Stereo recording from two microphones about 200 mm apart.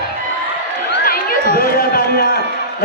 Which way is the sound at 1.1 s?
45° left (ahead or behind).